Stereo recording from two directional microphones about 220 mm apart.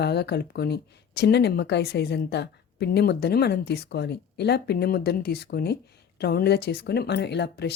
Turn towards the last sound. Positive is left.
turn(degrees=50)  # may be behind; listen again after turning